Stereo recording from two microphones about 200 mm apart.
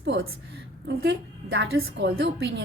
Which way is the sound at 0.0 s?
55° right (ahead or behind).